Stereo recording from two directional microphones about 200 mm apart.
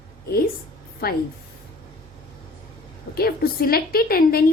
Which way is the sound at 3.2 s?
50° left (ahead or behind).